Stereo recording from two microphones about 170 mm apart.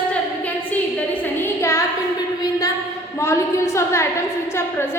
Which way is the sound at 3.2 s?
15° left (ahead or behind).